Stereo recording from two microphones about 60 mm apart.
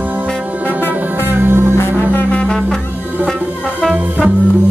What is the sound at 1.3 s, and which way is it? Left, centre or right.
Music, right.